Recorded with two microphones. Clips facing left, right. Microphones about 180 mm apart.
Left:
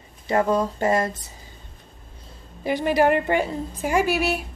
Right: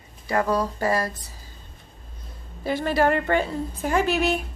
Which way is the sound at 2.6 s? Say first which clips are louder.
Left 2 dB; 15° left (ahead or behind).